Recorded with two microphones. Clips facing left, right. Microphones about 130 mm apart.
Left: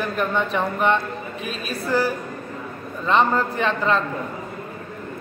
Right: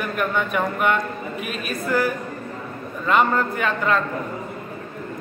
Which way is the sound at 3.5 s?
30° left (ahead or behind).